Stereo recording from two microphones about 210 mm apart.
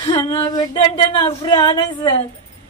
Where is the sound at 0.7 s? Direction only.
20° left (ahead or behind).